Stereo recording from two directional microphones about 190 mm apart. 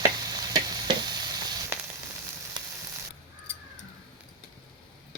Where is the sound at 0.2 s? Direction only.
20° right (ahead or behind).